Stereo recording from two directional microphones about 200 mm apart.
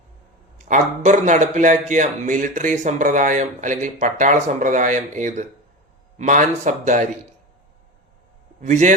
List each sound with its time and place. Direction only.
0.6 s a man's voice: 40° right (ahead or behind)
8.6 s a man's voice: 35° right (ahead or behind)